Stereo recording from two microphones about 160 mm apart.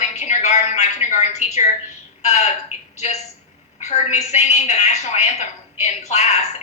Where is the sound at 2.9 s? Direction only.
45° left (ahead or behind).